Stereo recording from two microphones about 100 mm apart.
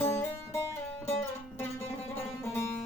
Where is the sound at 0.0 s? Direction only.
25° left (ahead or behind).